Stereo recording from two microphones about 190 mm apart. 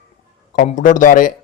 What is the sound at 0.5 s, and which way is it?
Speech, 40° left (ahead or behind).